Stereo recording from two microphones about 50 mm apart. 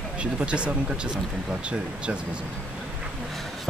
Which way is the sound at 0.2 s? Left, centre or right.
Right.